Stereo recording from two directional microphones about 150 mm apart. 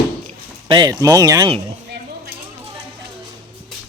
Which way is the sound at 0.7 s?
25° right (ahead or behind).